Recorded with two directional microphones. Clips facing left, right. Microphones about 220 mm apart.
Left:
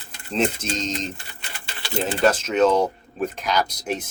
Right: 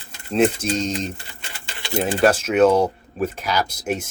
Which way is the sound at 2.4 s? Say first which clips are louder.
Right 3 dB; 10° right (ahead or behind).